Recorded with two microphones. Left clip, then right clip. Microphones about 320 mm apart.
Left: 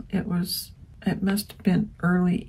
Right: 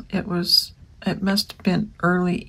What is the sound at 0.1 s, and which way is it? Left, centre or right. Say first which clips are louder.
Speech: right 11 dB; centre.